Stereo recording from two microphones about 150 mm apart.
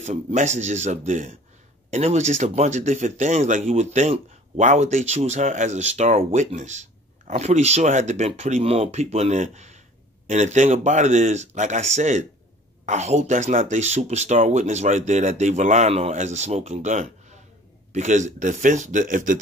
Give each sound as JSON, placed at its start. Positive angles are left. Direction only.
{"t": 0.0, "sound": "a man's voice", "side_deg": -55}